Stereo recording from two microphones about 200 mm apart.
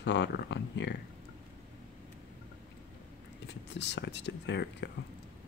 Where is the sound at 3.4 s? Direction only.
60° left (ahead or behind).